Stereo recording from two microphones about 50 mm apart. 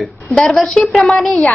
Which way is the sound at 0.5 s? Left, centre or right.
Centre.